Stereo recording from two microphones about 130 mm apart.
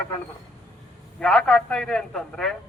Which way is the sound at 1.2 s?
5° left (ahead or behind).